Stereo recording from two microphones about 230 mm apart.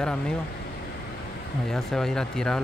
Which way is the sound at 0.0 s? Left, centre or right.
Centre.